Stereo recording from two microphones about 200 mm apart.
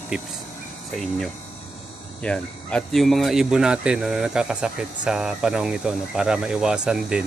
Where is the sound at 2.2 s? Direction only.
5° left (ahead or behind).